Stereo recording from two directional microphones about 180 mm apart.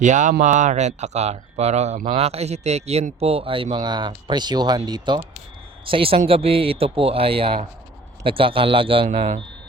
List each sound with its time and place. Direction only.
0.0 s a man's voice: 45° right (ahead or behind)